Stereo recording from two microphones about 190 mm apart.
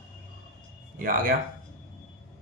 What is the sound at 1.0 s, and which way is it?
Speech, 50° right (ahead or behind).